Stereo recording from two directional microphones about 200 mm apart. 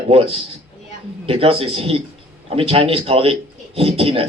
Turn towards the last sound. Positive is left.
turn(degrees=-30)  # may be behind; listen again after turning